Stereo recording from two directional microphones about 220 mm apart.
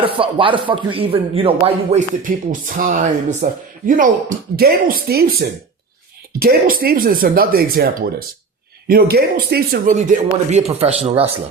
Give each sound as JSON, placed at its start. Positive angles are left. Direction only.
{"t": 0.0, "sound": "speech", "side_deg": -25}